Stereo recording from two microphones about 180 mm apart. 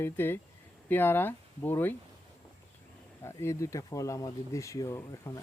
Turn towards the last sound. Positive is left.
turn(degrees=15)  # may be behind; listen again after turning